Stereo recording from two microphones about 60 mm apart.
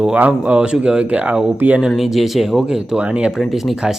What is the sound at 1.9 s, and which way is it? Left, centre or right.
Speech, centre.